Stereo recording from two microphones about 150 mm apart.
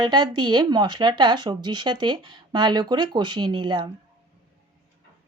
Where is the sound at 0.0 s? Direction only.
30° right (ahead or behind).